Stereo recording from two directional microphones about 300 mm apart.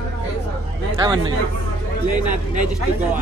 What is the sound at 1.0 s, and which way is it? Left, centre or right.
Speech, centre.